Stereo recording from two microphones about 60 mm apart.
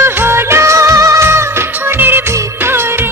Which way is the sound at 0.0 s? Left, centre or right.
Right.